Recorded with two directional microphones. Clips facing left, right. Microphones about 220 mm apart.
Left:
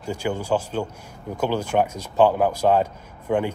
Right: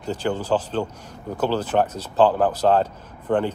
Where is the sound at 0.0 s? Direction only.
10° left (ahead or behind).